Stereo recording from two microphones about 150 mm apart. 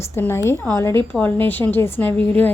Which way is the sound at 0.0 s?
15° left (ahead or behind).